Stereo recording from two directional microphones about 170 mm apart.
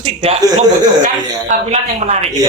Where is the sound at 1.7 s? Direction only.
40° right (ahead or behind).